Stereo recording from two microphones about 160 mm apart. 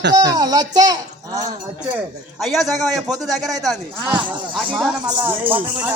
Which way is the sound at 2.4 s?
Centre (ahead or behind).